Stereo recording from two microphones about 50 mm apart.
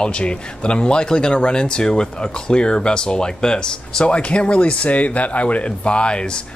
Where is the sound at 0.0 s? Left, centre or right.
Centre.